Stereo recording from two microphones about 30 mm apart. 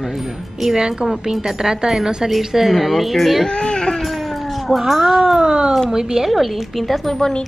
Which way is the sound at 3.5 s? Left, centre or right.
Left.